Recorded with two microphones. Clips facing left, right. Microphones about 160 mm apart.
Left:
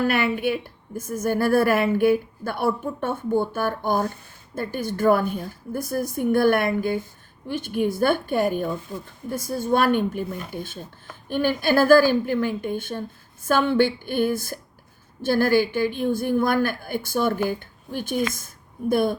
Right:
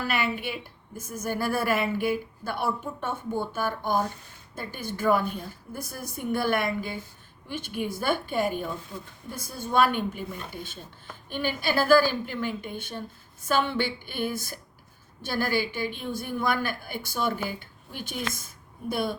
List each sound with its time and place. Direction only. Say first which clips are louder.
0.0 s a woman's voice: left 7 dB; 55° left (ahead or behind)